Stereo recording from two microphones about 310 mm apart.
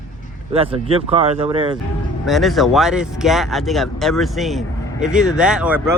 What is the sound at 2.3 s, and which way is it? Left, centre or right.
A man's voice, centre.